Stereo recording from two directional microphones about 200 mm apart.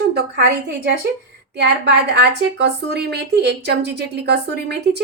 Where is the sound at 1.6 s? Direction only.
55° right (ahead or behind).